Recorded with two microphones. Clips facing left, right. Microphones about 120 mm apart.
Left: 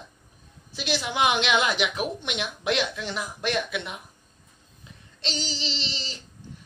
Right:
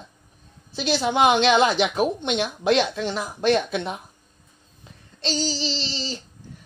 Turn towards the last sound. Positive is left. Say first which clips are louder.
# right 6 dB
turn(degrees=-30)  # may be behind; listen again after turning